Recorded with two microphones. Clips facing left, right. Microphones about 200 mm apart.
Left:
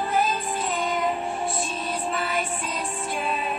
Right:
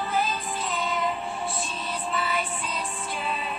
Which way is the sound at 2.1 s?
50° left (ahead or behind).